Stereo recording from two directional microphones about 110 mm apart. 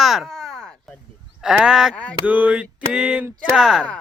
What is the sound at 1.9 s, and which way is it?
Speech, 10° left (ahead or behind).